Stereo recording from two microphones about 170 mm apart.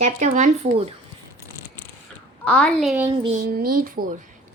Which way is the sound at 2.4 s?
5° left (ahead or behind).